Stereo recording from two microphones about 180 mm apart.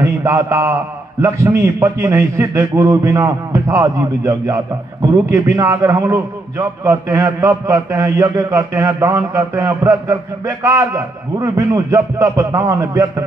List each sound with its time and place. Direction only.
0.0 s a man's voice: 15° right (ahead or behind)